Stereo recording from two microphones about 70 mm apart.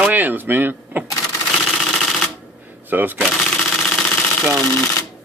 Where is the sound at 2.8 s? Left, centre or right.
Right.